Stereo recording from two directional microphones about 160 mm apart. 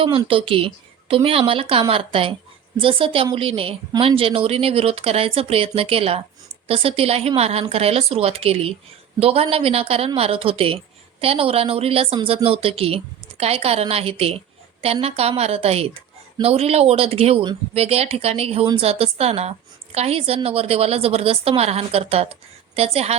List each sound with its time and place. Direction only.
0.0 s a woman's voice: 35° right (ahead or behind)